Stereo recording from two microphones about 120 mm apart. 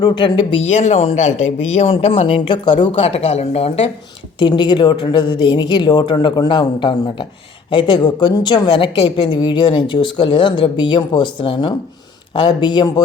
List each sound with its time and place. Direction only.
0.0 s a woman's voice: 40° left (ahead or behind)
0.6 s speech: 70° left (ahead or behind)
4.4 s a woman's voice: 40° left (ahead or behind)